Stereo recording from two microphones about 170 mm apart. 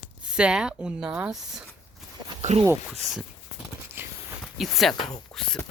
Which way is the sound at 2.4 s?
40° right (ahead or behind).